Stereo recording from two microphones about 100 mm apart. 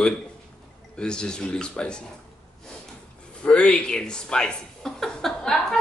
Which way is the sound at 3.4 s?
10° left (ahead or behind).